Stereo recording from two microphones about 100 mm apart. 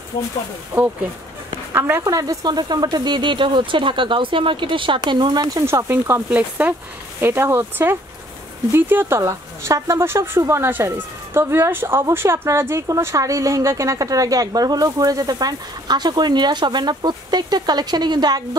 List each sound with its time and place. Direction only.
1.7 s speech: 25° right (ahead or behind)
2.0 s speech: 35° right (ahead or behind)
5.9 s a woman's voice: 25° right (ahead or behind); by 18.6 s 45° right (ahead or behind)